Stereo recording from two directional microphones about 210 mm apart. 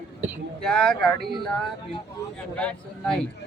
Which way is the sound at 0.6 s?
5° left (ahead or behind).